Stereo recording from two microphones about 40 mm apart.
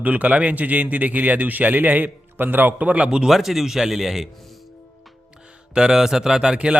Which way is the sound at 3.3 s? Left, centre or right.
Centre.